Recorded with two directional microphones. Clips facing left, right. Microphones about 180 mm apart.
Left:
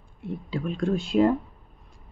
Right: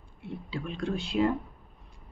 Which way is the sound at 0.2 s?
45° left (ahead or behind).